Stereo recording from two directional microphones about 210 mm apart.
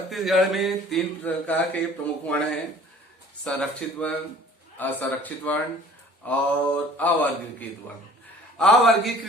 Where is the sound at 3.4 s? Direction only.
5° left (ahead or behind).